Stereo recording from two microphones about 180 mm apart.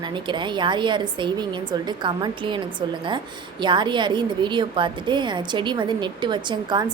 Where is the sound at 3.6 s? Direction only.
25° right (ahead or behind).